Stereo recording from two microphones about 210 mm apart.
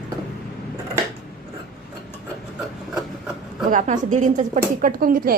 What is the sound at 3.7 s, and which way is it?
Speech, 35° right (ahead or behind).